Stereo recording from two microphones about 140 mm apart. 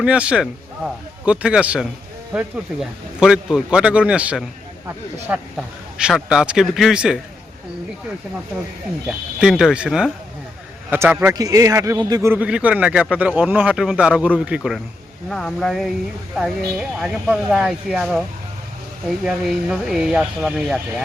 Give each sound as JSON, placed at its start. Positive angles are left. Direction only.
{"t": 0.0, "sound": "a man's voice", "side_deg": -10}
{"t": 3.2, "sound": "a man's voice", "side_deg": -5}
{"t": 9.0, "sound": "a man's voice", "side_deg": -5}
{"t": 12.3, "sound": "a man's voice", "side_deg": -10}